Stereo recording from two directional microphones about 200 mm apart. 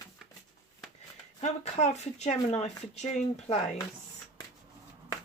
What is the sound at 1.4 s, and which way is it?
Speech, 35° left (ahead or behind).